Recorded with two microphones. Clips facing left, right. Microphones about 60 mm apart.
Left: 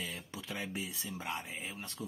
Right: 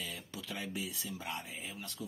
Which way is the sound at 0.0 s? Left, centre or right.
Left.